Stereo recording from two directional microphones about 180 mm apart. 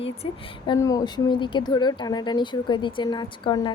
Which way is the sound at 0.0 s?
30° left (ahead or behind).